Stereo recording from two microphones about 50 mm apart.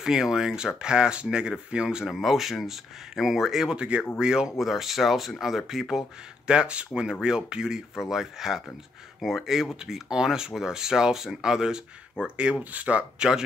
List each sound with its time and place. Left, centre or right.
0.0 s speech: centre
2.1 s speech: centre
3.7 s speech: centre
4.6 s speech: centre
6.4 s speech: centre
12.4 s speech: right